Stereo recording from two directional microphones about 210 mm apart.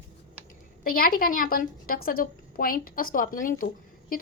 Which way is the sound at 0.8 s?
45° left (ahead or behind).